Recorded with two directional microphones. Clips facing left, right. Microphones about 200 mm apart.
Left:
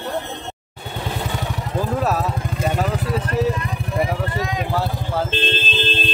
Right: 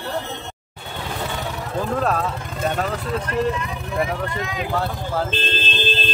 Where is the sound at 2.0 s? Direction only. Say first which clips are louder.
Left 1 dB; 5° left (ahead or behind).